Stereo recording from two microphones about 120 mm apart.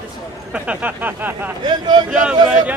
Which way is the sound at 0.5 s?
10° right (ahead or behind).